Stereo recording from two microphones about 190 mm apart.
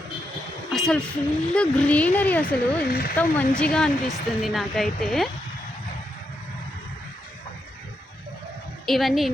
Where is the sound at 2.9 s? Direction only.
50° left (ahead or behind).